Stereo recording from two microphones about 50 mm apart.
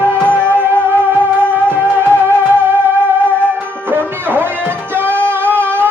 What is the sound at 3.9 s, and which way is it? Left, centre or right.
Music, right.